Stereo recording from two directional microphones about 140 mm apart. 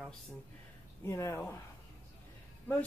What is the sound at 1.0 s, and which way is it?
Speech, 20° left (ahead or behind).